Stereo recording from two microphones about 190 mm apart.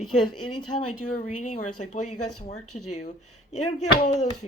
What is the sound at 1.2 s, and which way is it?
Speech, 40° left (ahead or behind).